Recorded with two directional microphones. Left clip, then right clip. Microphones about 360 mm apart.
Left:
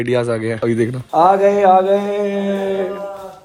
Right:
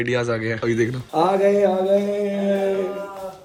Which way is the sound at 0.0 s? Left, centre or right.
Centre.